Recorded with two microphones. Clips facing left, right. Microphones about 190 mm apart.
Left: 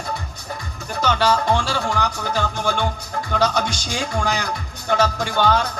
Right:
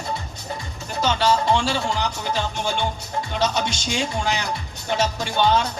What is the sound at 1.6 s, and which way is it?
Speech, 25° right (ahead or behind).